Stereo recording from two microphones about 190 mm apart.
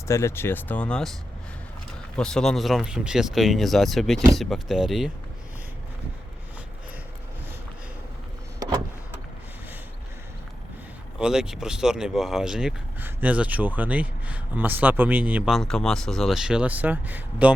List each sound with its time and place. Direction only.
0.1 s speech: 15° left (ahead or behind)
2.1 s speech: 5° left (ahead or behind)
8.5 s power windows: 20° right (ahead or behind)
11.2 s speech: 5° right (ahead or behind)